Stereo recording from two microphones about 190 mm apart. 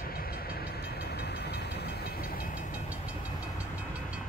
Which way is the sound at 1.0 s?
60° left (ahead or behind).